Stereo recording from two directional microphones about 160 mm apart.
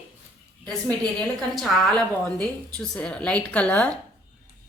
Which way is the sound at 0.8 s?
5° left (ahead or behind).